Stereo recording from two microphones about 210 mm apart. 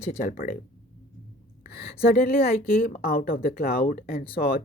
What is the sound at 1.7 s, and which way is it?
Speech, 45° left (ahead or behind).